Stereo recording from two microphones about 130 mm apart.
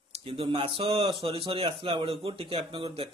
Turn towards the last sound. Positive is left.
turn(degrees=-45)  # may be behind; listen again after turning